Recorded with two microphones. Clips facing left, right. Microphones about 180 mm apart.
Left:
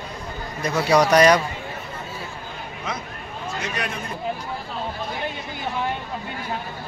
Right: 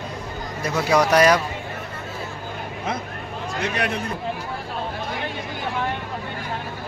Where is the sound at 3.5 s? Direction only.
60° right (ahead or behind).